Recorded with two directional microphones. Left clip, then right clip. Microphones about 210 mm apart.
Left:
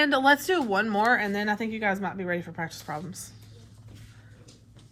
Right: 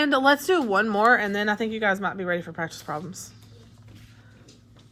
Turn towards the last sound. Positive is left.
turn(degrees=-20)  # may be behind; listen again after turning